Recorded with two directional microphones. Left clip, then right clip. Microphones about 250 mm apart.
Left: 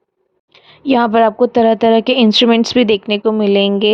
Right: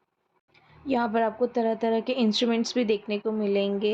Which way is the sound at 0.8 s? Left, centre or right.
Left.